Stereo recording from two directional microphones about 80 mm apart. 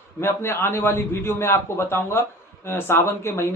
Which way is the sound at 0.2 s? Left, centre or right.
Left.